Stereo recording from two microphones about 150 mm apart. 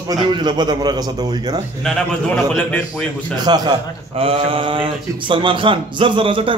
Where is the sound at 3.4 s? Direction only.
25° right (ahead or behind).